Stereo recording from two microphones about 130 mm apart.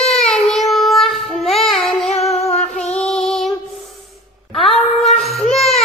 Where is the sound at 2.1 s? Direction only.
55° left (ahead or behind).